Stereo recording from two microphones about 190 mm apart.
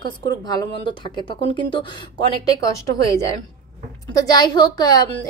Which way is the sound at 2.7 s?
15° left (ahead or behind).